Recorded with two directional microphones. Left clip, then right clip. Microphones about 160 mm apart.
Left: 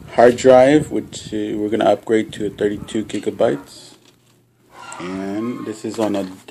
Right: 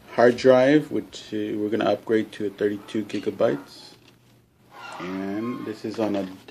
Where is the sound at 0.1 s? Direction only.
10° left (ahead or behind).